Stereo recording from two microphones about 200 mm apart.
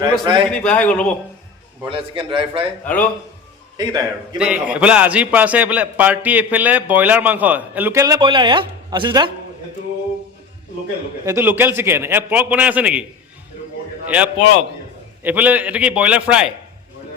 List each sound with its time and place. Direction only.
0.0 s a man's voice: 25° right (ahead or behind)
0.4 s a man's voice: 5° left (ahead or behind)
1.8 s a man's voice: 25° right (ahead or behind)
2.8 s a man's voice: 10° left (ahead or behind)
3.8 s a man's voice: 20° right (ahead or behind)
4.4 s a man's voice: 5° right (ahead or behind); by 9.3 s 25° right (ahead or behind)
11.3 s a man's voice: 10° right (ahead or behind)
15.2 s a man's voice: 10° right (ahead or behind)